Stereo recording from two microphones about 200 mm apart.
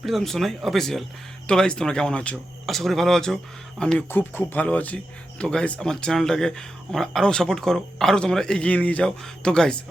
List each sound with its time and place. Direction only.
0.0 s speech: centre (ahead or behind)